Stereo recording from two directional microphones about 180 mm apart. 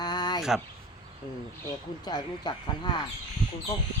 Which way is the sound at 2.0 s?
25° left (ahead or behind).